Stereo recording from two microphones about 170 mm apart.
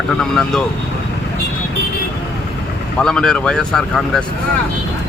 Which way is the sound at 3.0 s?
5° left (ahead or behind).